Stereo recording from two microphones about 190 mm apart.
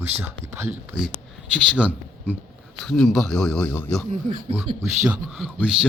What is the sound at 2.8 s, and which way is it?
Speech, centre (ahead or behind).